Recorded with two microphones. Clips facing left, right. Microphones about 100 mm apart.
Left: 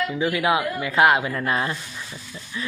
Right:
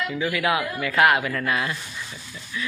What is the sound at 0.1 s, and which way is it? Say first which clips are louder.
Speech: left 2 dB; 25° left (ahead or behind).